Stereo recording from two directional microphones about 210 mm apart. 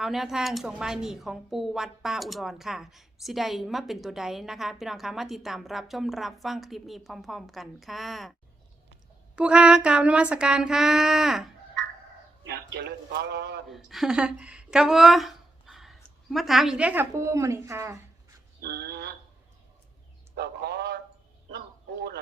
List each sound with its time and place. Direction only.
0.0 s speech: centre (ahead or behind)
9.3 s speech: 5° right (ahead or behind)
12.4 s a man's voice: 50° right (ahead or behind)
13.7 s speech: centre (ahead or behind)
18.6 s a man's voice: 50° right (ahead or behind)
20.3 s a man's voice: 50° right (ahead or behind)